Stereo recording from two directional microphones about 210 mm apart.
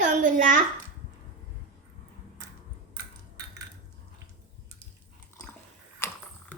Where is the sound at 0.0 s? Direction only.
40° right (ahead or behind).